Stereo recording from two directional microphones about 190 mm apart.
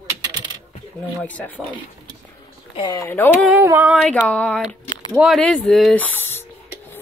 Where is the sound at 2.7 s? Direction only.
20° left (ahead or behind).